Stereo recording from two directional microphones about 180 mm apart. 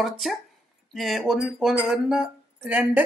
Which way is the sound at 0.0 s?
Centre (ahead or behind).